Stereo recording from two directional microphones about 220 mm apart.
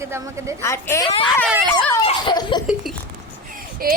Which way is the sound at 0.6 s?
10° left (ahead or behind).